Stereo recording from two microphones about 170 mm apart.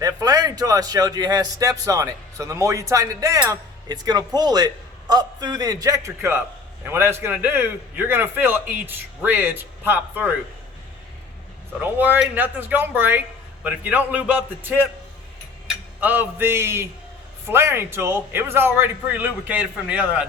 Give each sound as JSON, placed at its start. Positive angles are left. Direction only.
{"t": 0.0, "sound": "a man's voice", "side_deg": -20}
{"t": 11.8, "sound": "a man's voice", "side_deg": -10}